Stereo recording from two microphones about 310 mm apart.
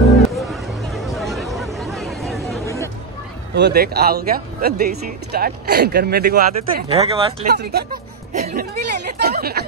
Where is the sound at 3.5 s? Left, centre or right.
Right.